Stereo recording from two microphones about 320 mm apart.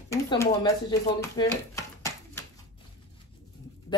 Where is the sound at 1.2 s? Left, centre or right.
Centre.